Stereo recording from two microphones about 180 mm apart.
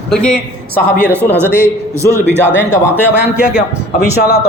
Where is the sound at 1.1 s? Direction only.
10° right (ahead or behind).